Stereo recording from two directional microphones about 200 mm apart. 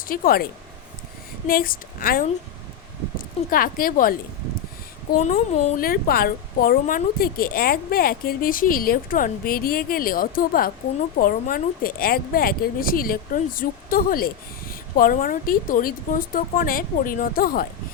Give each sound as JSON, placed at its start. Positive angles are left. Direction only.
{"t": 0.0, "sound": "speech", "side_deg": 45}
{"t": 1.5, "sound": "a woman's voice", "side_deg": 45}
{"t": 3.5, "sound": "a woman's voice", "side_deg": 45}
{"t": 5.2, "sound": "a woman's voice", "side_deg": 35}